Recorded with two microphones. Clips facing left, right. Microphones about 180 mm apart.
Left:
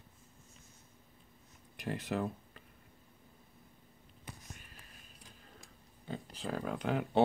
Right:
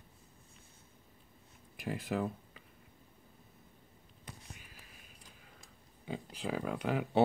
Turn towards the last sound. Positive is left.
turn(degrees=-5)  # may be behind; listen again after turning